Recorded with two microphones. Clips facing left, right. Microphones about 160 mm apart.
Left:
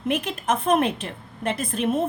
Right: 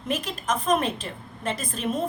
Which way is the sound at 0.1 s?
60° left (ahead or behind).